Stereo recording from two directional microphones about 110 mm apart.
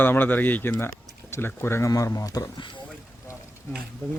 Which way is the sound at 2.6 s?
50° left (ahead or behind).